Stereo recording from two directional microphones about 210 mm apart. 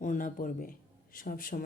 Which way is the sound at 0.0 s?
40° left (ahead or behind).